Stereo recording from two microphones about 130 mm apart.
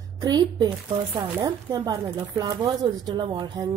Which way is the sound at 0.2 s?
30° right (ahead or behind).